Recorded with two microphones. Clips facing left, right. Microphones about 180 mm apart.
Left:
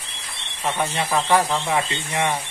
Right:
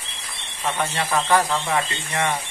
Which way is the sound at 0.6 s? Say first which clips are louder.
Left 1 dB; 15° left (ahead or behind).